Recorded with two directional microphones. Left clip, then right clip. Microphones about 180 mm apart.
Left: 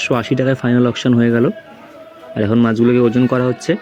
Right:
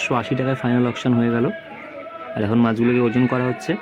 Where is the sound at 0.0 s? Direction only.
25° left (ahead or behind).